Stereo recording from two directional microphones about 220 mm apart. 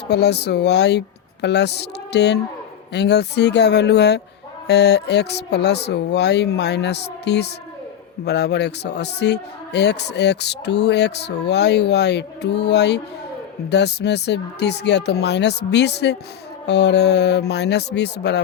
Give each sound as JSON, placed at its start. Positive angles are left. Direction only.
{"t": 0.1, "sound": "a man's voice", "side_deg": 50}